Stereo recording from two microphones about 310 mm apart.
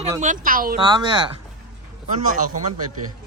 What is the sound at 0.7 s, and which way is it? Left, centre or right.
Speech, centre.